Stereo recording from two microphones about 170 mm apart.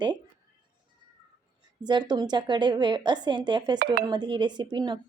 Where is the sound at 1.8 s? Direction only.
25° right (ahead or behind).